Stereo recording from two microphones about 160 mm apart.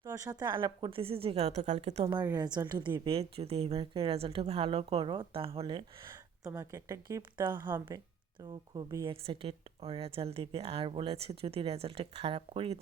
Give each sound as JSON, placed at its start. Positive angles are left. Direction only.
{"t": 0.0, "sound": "speech", "side_deg": -20}
{"t": 2.3, "sound": "speech", "side_deg": -25}
{"t": 3.0, "sound": "speech", "side_deg": -35}
{"t": 6.4, "sound": "speech", "side_deg": -20}
{"t": 9.2, "sound": "speech", "side_deg": -35}